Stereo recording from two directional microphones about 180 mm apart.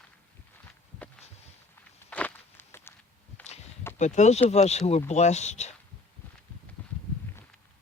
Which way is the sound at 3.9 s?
40° left (ahead or behind).